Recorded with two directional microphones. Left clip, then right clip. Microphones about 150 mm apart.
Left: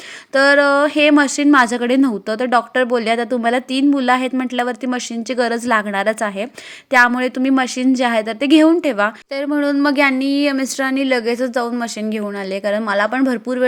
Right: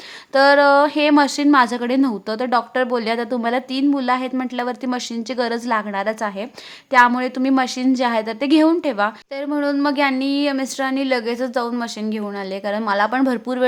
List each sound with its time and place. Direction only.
0.3 s a woman's voice: 15° left (ahead or behind)